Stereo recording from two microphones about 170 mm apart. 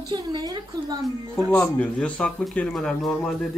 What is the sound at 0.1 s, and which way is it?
Speech, 25° right (ahead or behind).